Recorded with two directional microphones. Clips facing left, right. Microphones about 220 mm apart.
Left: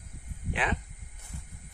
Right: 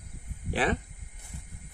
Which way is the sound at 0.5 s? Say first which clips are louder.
Right 5 dB; 40° right (ahead or behind).